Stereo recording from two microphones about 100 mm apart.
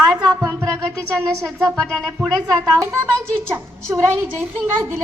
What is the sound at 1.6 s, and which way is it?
Speech, 5° left (ahead or behind).